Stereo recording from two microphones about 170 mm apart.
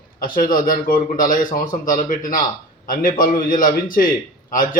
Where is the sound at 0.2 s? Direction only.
55° left (ahead or behind).